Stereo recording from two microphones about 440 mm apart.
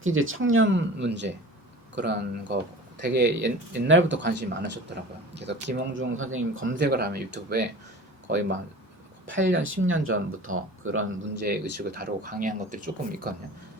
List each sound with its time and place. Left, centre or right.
0.0 s speech: right
9.3 s speech: right